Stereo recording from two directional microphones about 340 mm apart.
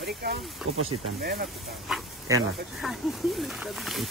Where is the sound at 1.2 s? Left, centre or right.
Right.